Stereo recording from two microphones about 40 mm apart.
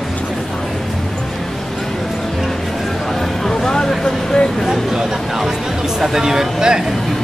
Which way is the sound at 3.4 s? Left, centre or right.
Centre.